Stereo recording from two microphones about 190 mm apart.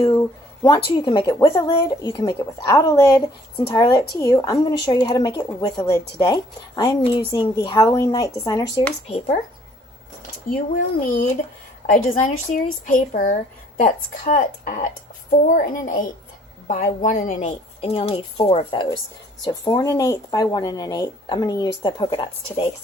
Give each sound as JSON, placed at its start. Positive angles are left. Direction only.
{"t": 0.0, "sound": "a woman's voice", "side_deg": 20}
{"t": 9.0, "sound": "a woman's voice", "side_deg": 35}
{"t": 11.0, "sound": "a woman's voice", "side_deg": 45}